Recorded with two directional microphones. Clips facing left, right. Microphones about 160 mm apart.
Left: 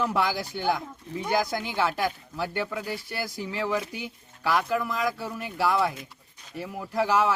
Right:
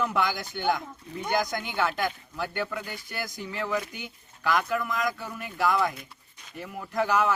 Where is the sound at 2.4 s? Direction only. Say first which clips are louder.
Left 2 dB; 25° left (ahead or behind).